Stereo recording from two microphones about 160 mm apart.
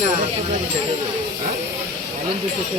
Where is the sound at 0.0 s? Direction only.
45° right (ahead or behind).